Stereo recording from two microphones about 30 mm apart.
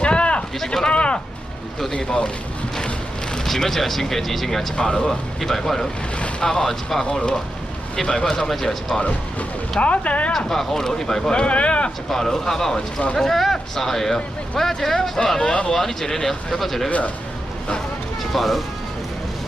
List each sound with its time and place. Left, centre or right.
0.0 s a sound: left
2.0 s speech: left
3.4 s speech: centre
4.7 s speech: left
5.4 s speech: centre
6.7 s speech: centre
8.1 s speech: left
8.4 s speech: centre
9.8 s speech: left
10.3 s speech: centre
11.3 s speech: left
12.1 s speech: centre
13.1 s speech: centre
18.3 s speech: centre